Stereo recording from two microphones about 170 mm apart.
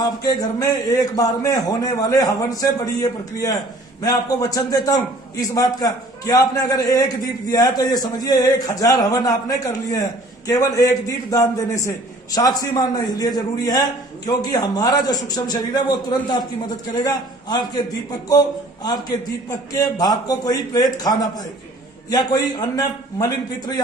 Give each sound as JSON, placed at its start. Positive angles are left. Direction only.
{"t": 0.0, "sound": "a man's voice", "side_deg": 20}